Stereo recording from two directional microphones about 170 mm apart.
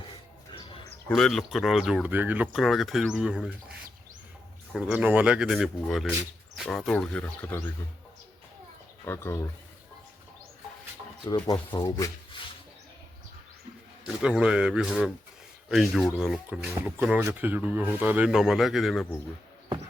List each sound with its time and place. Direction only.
0.9 s speech: 5° left (ahead or behind)
4.9 s speech: 10° right (ahead or behind); by 7.6 s 10° left (ahead or behind)
9.0 s speech: 15° left (ahead or behind)
11.4 s speech: 25° left (ahead or behind)
14.2 s speech: 5° right (ahead or behind)